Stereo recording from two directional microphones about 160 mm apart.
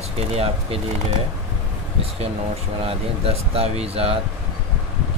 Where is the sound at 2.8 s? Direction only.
40° right (ahead or behind).